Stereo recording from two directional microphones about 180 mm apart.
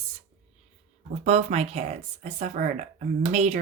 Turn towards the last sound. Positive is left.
turn(degrees=-40)  # may be behind; listen again after turning